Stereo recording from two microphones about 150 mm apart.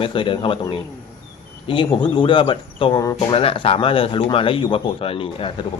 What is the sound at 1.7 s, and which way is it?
Speech, 35° left (ahead or behind).